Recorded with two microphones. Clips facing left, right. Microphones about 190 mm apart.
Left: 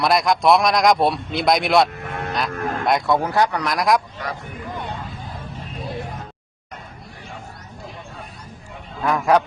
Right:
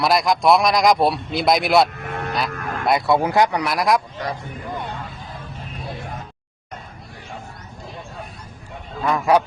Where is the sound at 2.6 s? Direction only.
25° left (ahead or behind).